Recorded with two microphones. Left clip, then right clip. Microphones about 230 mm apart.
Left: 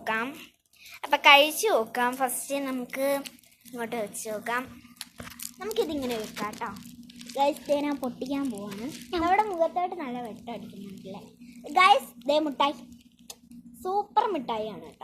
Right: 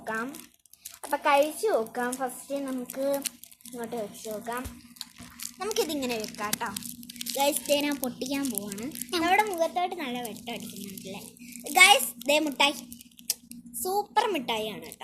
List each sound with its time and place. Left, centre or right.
0.0 s a woman's voice: centre
5.5 s speech: right
7.2 s speech: right
11.6 s speech: centre
13.8 s speech: centre